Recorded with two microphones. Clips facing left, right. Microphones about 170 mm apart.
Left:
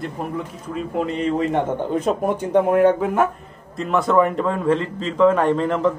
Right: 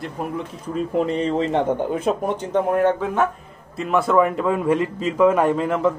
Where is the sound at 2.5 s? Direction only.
15° left (ahead or behind).